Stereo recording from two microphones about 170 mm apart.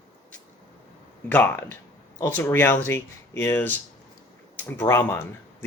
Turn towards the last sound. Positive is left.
turn(degrees=15)  # may be behind; listen again after turning